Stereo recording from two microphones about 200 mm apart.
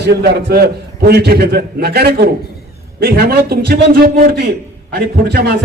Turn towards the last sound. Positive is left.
turn(degrees=-55)  # may be behind; listen again after turning